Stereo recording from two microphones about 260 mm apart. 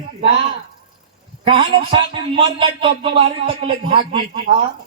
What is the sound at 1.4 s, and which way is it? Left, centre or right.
A man's voice, centre.